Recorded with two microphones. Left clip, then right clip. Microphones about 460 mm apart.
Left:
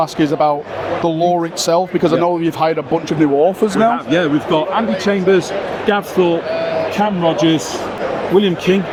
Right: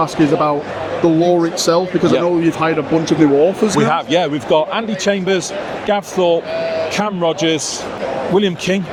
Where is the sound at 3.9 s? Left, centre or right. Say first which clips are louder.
Even; right.